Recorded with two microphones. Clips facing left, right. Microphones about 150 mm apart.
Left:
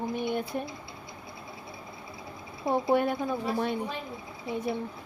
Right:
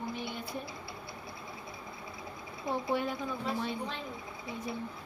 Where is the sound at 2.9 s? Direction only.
55° left (ahead or behind).